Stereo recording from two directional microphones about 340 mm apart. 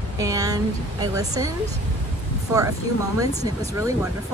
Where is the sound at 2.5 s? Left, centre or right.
Centre.